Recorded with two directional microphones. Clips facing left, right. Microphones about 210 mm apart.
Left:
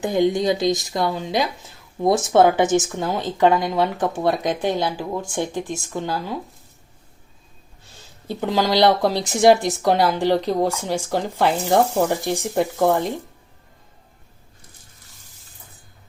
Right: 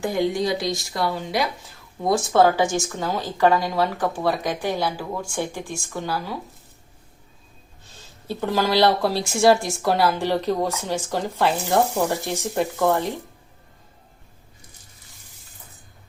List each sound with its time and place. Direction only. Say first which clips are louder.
0.0 s speech: left 3 dB; 20° left (ahead or behind)
8.3 s speech: left 1 dB; 15° left (ahead or behind)